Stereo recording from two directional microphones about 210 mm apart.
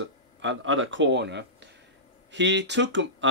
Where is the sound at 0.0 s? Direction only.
60° right (ahead or behind).